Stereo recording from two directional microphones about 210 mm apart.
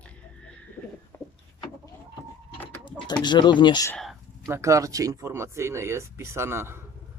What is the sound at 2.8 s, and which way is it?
Speech, 20° left (ahead or behind).